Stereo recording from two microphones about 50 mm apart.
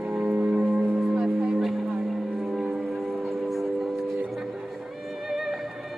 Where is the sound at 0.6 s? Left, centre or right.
Centre.